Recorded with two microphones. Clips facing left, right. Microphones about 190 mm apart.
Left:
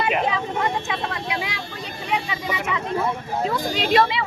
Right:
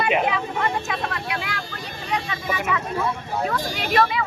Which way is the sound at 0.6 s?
20° left (ahead or behind).